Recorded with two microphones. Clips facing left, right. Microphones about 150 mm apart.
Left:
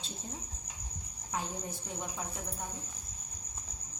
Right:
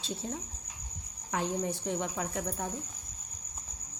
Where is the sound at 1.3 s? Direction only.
75° right (ahead or behind); by 2.4 s 90° right.